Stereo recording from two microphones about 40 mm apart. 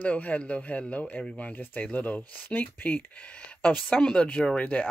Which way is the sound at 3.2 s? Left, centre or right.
Left.